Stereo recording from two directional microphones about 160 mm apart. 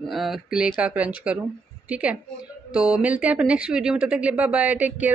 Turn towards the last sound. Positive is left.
turn(degrees=-10)  # may be behind; listen again after turning